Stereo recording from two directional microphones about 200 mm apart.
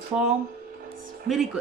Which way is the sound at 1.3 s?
50° right (ahead or behind).